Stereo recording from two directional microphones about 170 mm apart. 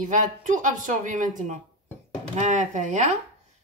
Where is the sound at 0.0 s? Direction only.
50° right (ahead or behind).